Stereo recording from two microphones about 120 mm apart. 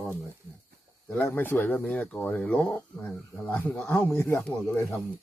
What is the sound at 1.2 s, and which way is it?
Speech, 15° left (ahead or behind).